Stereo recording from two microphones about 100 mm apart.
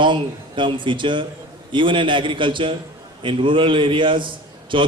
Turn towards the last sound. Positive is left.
turn(degrees=-55)  # may be behind; listen again after turning